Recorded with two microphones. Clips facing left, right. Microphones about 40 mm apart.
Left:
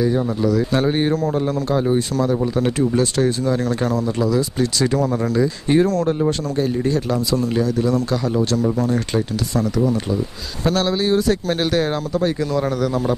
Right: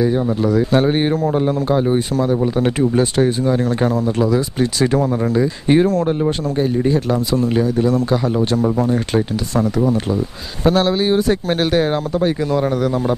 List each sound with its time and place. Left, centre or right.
0.0 s speech: centre